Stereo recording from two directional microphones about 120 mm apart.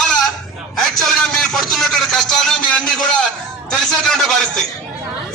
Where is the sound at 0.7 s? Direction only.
5° left (ahead or behind).